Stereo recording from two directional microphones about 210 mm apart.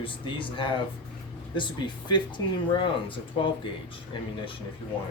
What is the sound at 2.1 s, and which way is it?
Speech, 20° left (ahead or behind).